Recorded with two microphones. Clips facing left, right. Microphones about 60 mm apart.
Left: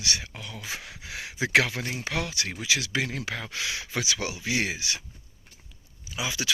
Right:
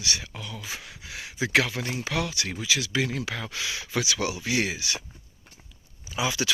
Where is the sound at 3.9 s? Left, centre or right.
Left.